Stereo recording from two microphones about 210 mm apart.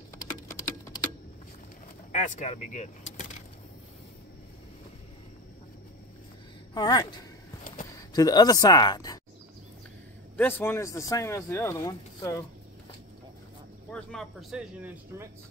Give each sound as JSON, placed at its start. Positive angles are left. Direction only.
{"t": 2.1, "sound": "speech", "side_deg": 35}
{"t": 6.7, "sound": "speech", "side_deg": 20}
{"t": 10.3, "sound": "speech", "side_deg": 10}
{"t": 13.8, "sound": "speech", "side_deg": 5}